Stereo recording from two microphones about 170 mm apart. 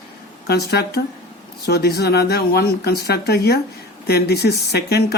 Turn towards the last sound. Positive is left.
turn(degrees=70)  # may be behind; listen again after turning